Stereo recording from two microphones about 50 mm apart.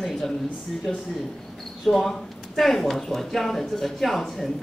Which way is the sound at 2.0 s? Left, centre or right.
Centre.